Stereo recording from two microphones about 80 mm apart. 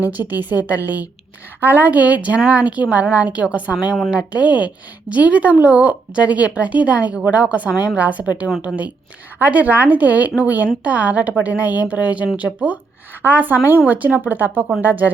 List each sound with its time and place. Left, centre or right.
0.0 s speech: right